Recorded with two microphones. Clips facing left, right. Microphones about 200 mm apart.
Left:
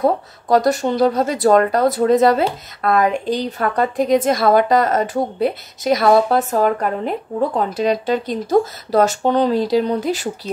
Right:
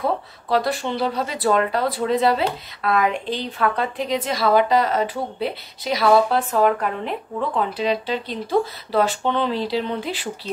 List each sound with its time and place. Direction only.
0.0 s speech: 45° left (ahead or behind)